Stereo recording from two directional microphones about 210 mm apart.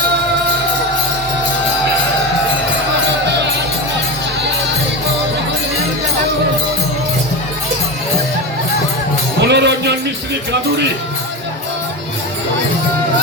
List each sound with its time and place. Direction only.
9.4 s music: 55° right (ahead or behind)